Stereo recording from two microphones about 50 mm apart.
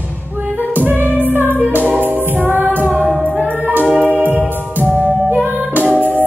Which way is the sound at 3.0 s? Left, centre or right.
Centre.